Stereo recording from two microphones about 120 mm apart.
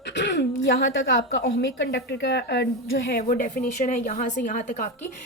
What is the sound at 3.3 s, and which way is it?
A woman's voice, 90° left.